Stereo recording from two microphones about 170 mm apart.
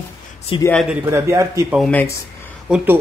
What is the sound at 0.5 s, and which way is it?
Speech, 30° left (ahead or behind).